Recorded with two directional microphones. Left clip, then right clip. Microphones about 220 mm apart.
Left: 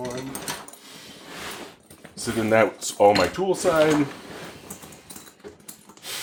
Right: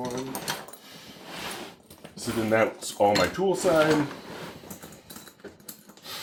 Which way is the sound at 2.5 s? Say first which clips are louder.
Left 5 dB; 35° left (ahead or behind).